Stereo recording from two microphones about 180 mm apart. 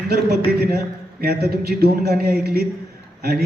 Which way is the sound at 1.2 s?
60° right (ahead or behind).